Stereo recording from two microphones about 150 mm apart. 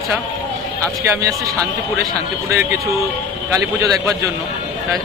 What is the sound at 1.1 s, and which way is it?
Speech, 20° right (ahead or behind).